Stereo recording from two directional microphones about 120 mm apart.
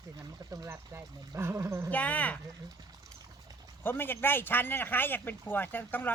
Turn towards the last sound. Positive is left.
turn(degrees=15)  # may be behind; listen again after turning